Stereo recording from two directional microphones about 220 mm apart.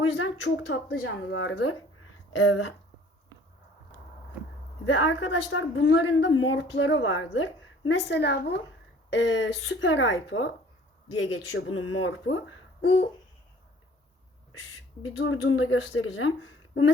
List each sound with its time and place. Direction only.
0.0 s speech: 65° left (ahead or behind)
2.3 s speech: 70° left (ahead or behind)
4.9 s speech: 60° left (ahead or behind)
12.8 s a sound: 55° left (ahead or behind)
15.2 s speech: 65° left (ahead or behind)